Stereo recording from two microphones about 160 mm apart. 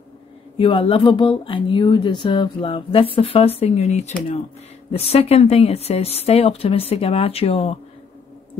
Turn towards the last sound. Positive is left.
turn(degrees=40)  # may be behind; listen again after turning